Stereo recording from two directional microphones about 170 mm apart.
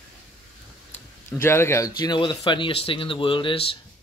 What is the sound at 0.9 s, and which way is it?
Speech, 15° left (ahead or behind).